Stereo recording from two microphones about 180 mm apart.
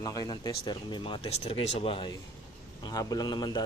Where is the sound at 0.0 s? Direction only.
20° left (ahead or behind).